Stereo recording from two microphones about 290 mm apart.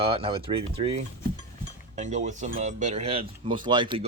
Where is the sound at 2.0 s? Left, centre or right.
Right.